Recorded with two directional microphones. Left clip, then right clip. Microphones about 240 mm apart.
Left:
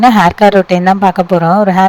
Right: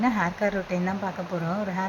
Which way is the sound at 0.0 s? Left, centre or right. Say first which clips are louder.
Left 19 dB; left.